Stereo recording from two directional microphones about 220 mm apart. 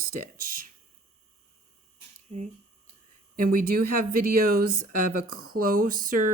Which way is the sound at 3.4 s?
40° right (ahead or behind).